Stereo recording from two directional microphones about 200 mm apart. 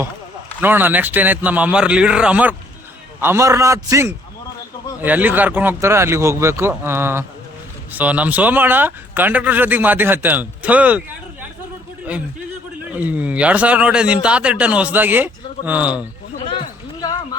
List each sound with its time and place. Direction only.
0.6 s a man's voice: 10° right (ahead or behind)
12.8 s a man's voice: 10° right (ahead or behind)
16.4 s a sound: 25° left (ahead or behind)